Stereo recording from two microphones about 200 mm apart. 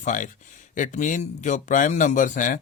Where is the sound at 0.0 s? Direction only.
40° left (ahead or behind).